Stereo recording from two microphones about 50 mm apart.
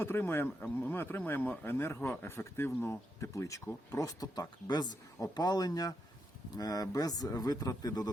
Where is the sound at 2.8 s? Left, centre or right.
Left.